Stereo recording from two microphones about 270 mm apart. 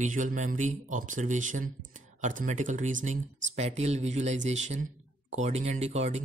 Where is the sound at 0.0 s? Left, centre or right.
Right.